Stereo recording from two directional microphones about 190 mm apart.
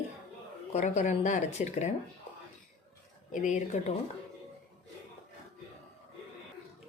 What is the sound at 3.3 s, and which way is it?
Speech, 40° left (ahead or behind).